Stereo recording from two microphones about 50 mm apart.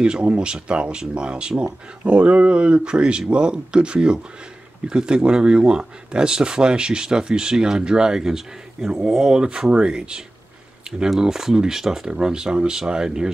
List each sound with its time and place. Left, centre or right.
0.0 s speech: right